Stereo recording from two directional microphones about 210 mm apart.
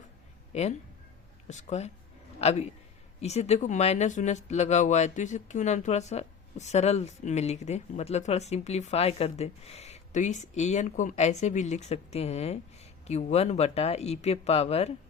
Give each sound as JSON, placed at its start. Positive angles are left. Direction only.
{"t": 0.5, "sound": "speech", "side_deg": 30}